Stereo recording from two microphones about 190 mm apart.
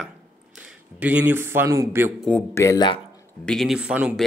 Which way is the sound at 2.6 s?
20° left (ahead or behind).